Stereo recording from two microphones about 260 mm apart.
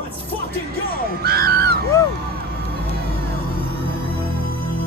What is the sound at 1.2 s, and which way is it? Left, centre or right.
Music, right.